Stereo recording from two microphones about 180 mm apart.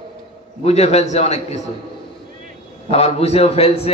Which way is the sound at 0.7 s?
35° left (ahead or behind).